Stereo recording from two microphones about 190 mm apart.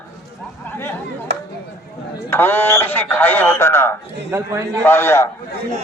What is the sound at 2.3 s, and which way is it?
A man's voice, 10° left (ahead or behind).